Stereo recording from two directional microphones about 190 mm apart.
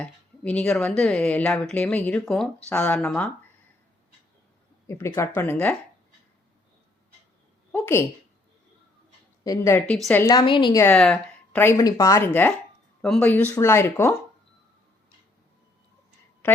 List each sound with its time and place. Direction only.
0.0 s speech: 5° left (ahead or behind)
4.9 s speech: 15° left (ahead or behind)
7.7 s a woman's voice: 15° left (ahead or behind)
9.4 s speech: 15° left (ahead or behind)
10.2 s a woman's voice: 25° left (ahead or behind)
10.8 s speech: 5° left (ahead or behind)